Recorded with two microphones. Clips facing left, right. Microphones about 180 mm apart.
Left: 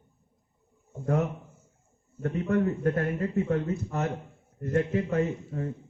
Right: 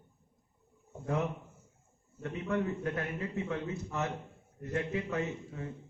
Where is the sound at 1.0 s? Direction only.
45° left (ahead or behind).